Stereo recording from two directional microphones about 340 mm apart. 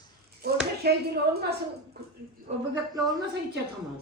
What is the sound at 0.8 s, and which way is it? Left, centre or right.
Speech, right.